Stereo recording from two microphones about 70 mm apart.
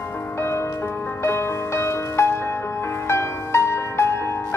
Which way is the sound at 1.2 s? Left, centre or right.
Left.